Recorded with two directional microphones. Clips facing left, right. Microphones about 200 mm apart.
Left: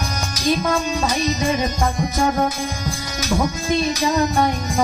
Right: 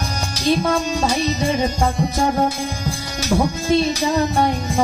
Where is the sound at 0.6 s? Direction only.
30° right (ahead or behind).